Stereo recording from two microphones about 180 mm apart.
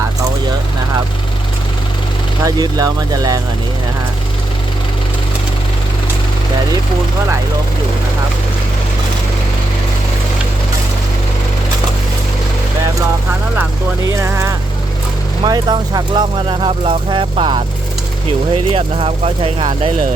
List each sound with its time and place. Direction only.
2.4 s speech: 20° right (ahead or behind)
14.1 s speech: 15° right (ahead or behind)